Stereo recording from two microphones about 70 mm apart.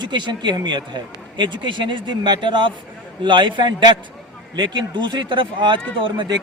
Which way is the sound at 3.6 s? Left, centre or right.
Right.